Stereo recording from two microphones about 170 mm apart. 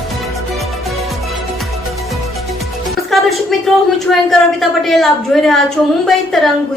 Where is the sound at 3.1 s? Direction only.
Centre (ahead or behind).